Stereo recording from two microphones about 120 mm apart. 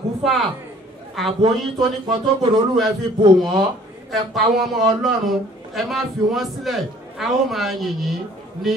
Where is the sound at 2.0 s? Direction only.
40° right (ahead or behind).